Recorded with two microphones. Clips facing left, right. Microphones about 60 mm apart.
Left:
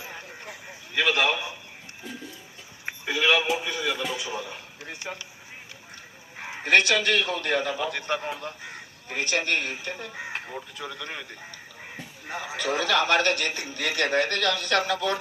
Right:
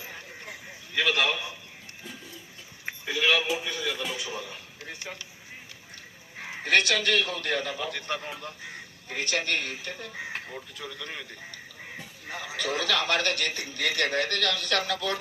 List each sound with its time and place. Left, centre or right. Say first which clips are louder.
0.0 s a sound: left 2 dB; left
0.9 s a man's voice: left 2 dB; left
3.4 s a man's voice: left 3 dB; left
4.2 s a man's voice: left 3 dB; left
6.4 s a man's voice: left 3 dB; left
8.6 s speech: left 1 dB; left
10.8 s a man's voice: left 1 dB; left
12.3 s a man's voice: left 3 dB; left